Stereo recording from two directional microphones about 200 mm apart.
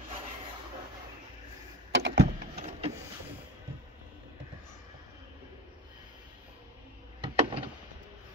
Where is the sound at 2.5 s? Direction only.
35° right (ahead or behind).